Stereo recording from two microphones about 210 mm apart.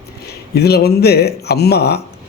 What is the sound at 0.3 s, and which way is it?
Speech, 50° left (ahead or behind).